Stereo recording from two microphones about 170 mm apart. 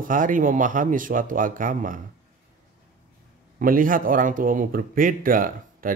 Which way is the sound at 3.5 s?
55° right (ahead or behind).